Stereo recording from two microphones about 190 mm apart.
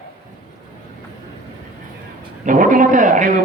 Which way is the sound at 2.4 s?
45° right (ahead or behind).